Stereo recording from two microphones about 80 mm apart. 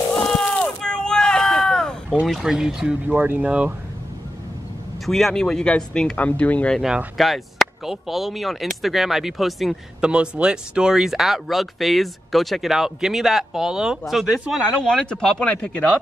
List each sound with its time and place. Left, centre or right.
0.1 s a sound: centre
2.2 s speech: centre
5.0 s speech: centre
7.2 s speech: centre
9.9 s speech: centre
14.8 s speech: centre